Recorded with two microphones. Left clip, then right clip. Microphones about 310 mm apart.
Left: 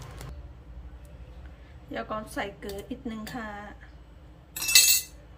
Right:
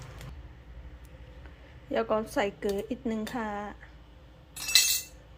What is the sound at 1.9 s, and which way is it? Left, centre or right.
A woman's voice, centre.